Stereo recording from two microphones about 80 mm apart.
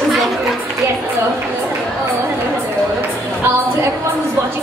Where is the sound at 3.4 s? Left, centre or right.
Right.